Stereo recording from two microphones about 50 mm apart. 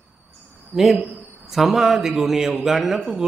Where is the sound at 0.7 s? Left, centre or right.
Centre.